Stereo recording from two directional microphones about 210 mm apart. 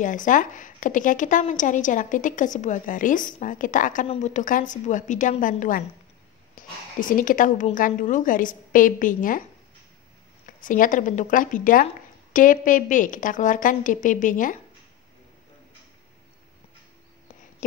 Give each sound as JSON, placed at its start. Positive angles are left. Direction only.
{"t": 0.0, "sound": "a woman's voice", "side_deg": 40}
{"t": 7.0, "sound": "a woman's voice", "side_deg": 40}
{"t": 10.4, "sound": "a woman's voice", "side_deg": 40}